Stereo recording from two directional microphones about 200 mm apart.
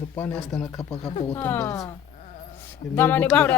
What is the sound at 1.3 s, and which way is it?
Speech, 10° left (ahead or behind).